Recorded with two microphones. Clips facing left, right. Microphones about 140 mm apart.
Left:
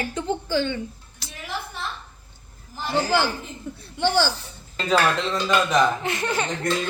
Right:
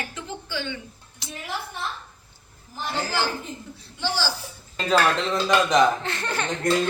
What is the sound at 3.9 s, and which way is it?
Speech, 60° left (ahead or behind).